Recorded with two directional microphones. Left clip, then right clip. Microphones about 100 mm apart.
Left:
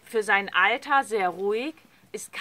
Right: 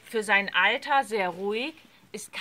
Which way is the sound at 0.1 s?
35° left (ahead or behind).